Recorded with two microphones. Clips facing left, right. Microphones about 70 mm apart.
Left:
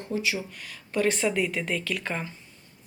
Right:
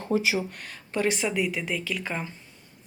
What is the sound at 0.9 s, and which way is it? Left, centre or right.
Speech, centre.